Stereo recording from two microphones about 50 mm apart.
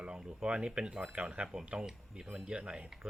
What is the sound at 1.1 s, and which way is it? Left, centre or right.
Speech, right.